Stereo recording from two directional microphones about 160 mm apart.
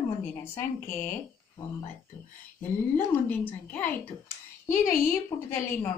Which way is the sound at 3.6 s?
10° left (ahead or behind).